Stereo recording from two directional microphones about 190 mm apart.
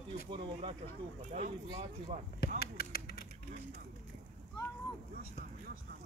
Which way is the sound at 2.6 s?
55° left (ahead or behind).